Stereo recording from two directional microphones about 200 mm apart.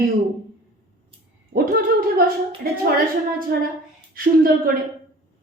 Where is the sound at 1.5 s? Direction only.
45° right (ahead or behind).